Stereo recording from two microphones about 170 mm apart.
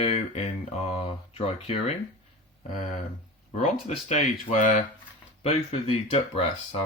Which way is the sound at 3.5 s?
45° left (ahead or behind).